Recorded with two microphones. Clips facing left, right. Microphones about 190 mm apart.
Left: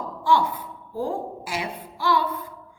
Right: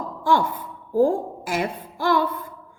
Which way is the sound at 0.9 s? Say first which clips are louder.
Right 9 dB; 50° right (ahead or behind).